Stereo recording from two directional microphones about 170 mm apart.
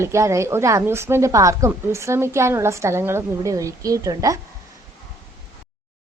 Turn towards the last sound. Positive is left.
turn(degrees=-20)  # may be behind; listen again after turning